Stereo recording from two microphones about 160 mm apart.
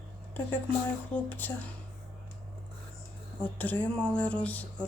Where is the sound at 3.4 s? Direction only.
10° left (ahead or behind).